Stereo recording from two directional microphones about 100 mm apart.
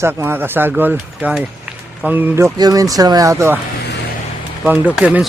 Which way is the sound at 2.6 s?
35° right (ahead or behind).